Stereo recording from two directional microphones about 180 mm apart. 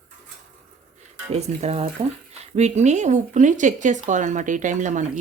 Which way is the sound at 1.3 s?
35° right (ahead or behind).